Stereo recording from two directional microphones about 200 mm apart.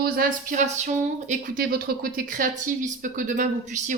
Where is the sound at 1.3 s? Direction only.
45° right (ahead or behind).